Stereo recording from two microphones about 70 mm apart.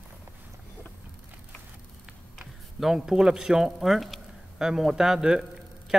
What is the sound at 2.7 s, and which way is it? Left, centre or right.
Speech, centre.